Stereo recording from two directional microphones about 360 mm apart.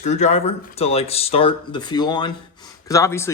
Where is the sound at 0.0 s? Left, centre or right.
Centre.